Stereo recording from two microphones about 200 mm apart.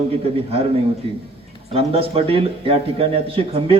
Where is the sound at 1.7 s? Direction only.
30° right (ahead or behind).